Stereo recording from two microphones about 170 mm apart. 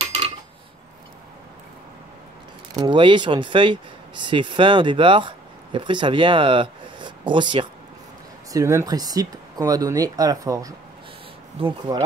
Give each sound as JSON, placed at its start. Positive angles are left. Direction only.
{"t": 2.7, "sound": "speech", "side_deg": -25}
{"t": 11.6, "sound": "speech", "side_deg": -30}